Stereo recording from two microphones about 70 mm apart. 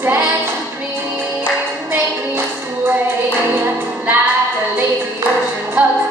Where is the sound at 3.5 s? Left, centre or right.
Right.